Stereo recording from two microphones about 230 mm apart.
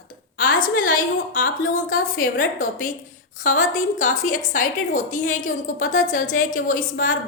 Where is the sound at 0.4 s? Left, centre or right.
Left.